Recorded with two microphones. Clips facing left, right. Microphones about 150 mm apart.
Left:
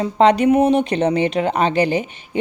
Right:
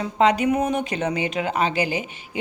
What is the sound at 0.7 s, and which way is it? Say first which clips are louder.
Speech: left 7 dB; 65° left (ahead or behind).